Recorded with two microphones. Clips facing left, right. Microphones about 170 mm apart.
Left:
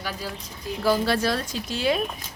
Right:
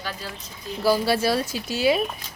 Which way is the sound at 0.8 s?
5° right (ahead or behind).